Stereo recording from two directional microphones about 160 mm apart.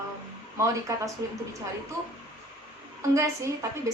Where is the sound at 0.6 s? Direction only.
20° right (ahead or behind).